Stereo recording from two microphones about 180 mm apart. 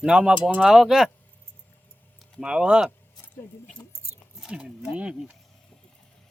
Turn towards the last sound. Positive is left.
turn(degrees=-5)  # may be behind; listen again after turning